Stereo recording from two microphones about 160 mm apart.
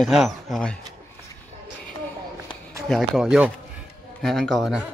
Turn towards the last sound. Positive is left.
turn(degrees=0)  # may be behind; listen again after turning